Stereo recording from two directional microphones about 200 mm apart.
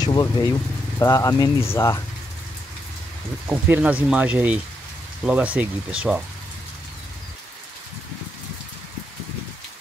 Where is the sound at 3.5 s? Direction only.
5° right (ahead or behind).